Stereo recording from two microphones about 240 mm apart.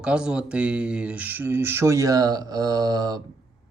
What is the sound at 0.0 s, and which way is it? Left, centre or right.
Speech, centre.